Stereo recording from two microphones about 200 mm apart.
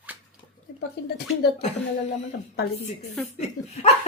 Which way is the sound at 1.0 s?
55° left (ahead or behind).